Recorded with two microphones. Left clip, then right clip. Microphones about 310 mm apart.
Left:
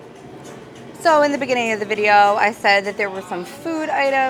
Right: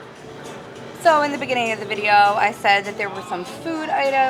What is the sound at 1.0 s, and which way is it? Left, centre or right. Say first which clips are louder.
A woman's voice: left 2 dB; left.